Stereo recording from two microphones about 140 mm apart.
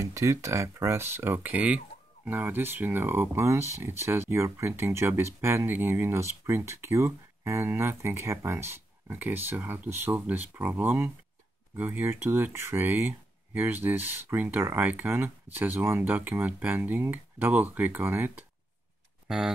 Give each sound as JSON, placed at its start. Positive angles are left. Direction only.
{"t": 0.0, "sound": "speech", "side_deg": -20}
{"t": 19.2, "sound": "speech", "side_deg": -5}